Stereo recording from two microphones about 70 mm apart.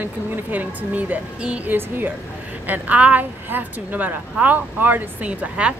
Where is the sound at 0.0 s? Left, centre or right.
Right.